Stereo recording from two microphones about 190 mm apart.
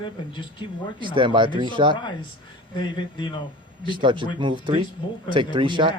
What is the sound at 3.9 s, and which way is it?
Speech, 25° right (ahead or behind).